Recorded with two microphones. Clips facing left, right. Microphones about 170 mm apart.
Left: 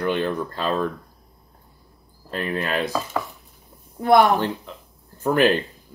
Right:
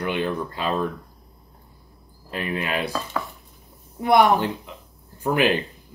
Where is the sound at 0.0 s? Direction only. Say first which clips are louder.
Left 2 dB; 10° right (ahead or behind).